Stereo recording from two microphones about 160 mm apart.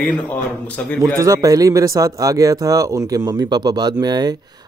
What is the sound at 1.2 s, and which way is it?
Speech, 20° right (ahead or behind).